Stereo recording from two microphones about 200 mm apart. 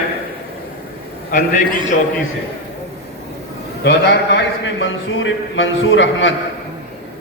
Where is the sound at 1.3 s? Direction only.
40° left (ahead or behind).